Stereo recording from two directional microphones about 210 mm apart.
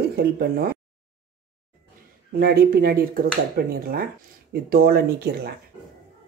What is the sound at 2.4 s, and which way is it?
Speech, 45° right (ahead or behind).